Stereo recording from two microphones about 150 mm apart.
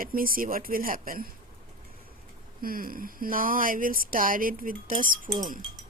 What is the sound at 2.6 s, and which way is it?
Speech, 70° right (ahead or behind).